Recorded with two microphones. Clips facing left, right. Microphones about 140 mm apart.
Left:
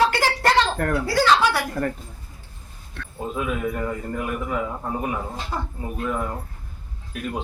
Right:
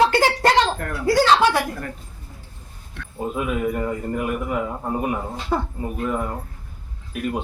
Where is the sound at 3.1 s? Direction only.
10° right (ahead or behind).